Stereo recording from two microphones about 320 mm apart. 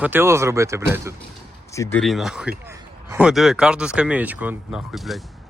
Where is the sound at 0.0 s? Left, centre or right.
Centre.